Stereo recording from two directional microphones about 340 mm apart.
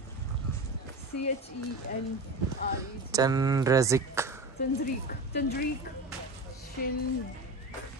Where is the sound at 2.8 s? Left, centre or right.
Centre.